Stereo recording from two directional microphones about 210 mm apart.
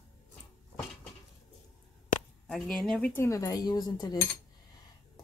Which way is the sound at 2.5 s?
Centre (ahead or behind).